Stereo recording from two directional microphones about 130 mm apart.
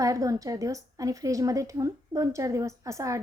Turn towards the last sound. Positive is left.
turn(degrees=-25)  # may be behind; listen again after turning